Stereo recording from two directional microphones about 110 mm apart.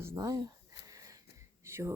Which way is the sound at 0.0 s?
25° right (ahead or behind).